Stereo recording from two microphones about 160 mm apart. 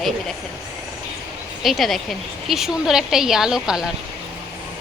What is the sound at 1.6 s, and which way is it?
A woman's voice, centre (ahead or behind).